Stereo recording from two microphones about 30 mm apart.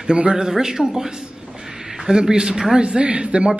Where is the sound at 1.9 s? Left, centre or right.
Centre.